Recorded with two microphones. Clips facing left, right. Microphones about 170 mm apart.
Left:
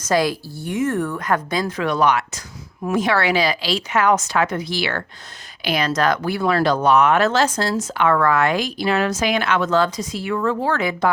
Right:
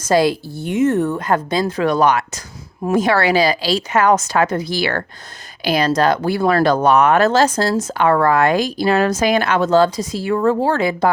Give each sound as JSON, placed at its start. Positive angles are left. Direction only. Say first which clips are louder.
{"t": 0.1, "sound": "speech", "louder": "right 4 dB", "side_deg": -30}